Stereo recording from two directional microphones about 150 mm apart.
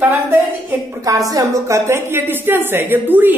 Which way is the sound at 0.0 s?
10° right (ahead or behind).